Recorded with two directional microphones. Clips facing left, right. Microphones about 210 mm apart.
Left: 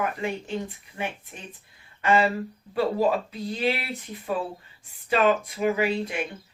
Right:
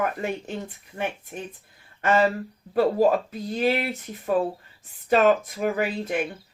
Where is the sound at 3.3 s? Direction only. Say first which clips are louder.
Right 3 dB; 45° right (ahead or behind).